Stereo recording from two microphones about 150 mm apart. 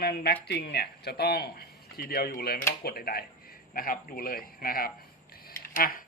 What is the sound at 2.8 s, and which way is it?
A man's voice, 90° left.